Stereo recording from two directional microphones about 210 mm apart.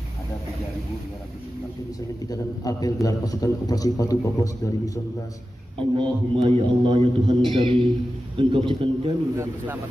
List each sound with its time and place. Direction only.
2.2 s a man's voice: 15° left (ahead or behind)
5.8 s a man's voice: 25° right (ahead or behind)